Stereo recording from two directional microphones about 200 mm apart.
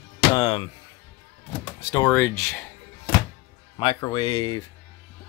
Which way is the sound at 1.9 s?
15° left (ahead or behind).